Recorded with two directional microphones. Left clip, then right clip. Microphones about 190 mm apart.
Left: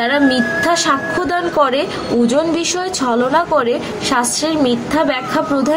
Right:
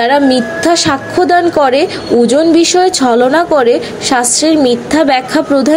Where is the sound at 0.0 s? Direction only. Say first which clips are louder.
Right 5 dB; 25° right (ahead or behind).